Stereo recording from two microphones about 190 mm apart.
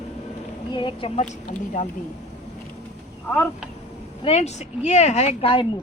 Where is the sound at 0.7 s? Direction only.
25° left (ahead or behind).